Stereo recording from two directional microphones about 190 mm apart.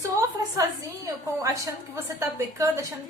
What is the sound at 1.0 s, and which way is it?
A woman's voice, 15° right (ahead or behind).